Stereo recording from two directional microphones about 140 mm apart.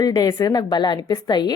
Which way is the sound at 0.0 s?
25° left (ahead or behind).